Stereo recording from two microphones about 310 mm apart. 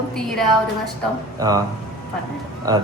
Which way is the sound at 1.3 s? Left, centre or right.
Centre.